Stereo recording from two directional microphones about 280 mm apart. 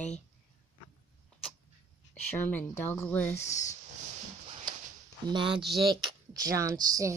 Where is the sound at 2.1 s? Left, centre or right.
Centre.